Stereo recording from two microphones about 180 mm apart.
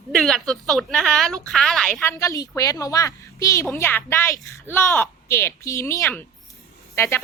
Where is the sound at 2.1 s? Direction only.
15° left (ahead or behind).